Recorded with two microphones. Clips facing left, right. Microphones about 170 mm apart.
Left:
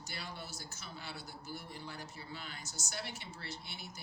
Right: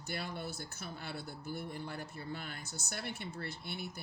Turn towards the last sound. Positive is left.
turn(degrees=-55)  # may be behind; listen again after turning